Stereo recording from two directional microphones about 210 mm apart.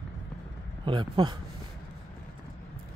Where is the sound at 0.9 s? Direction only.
20° right (ahead or behind).